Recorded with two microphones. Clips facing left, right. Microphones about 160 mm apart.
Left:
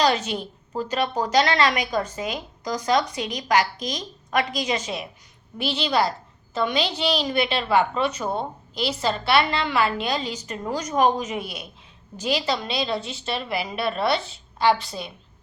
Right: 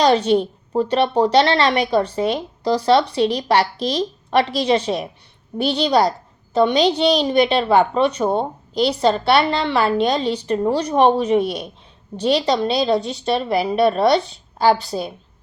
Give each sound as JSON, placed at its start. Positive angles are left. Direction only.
{"t": 0.0, "sound": "a woman's voice", "side_deg": -35}